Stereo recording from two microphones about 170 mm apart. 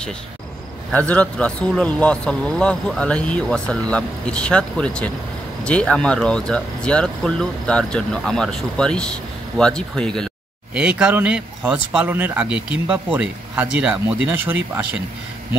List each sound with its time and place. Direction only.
0.9 s speech: 10° left (ahead or behind); by 14.9 s 10° right (ahead or behind)